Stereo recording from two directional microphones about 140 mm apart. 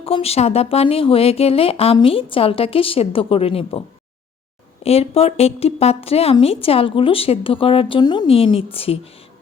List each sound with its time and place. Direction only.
0.0 s a woman's voice: 45° left (ahead or behind)
8.3 s speech: 40° left (ahead or behind)